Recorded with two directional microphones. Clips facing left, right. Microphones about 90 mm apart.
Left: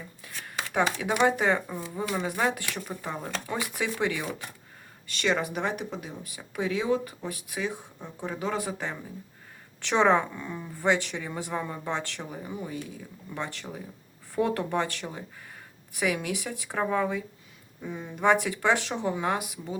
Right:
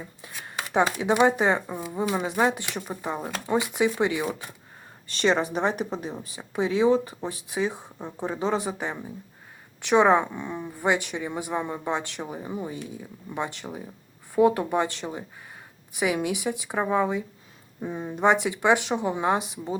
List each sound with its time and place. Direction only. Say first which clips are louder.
0.4 s speech: right 3 dB; 20° right (ahead or behind)
5.0 s a woman's voice: right 4 dB; 30° right (ahead or behind)
17.8 s speech: right 2 dB; 30° right (ahead or behind)